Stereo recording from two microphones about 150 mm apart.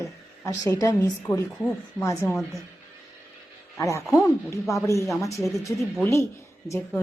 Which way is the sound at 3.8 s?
20° left (ahead or behind).